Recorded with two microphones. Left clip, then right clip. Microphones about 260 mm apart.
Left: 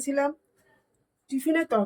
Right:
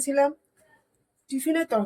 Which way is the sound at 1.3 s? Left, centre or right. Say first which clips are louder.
Even; centre.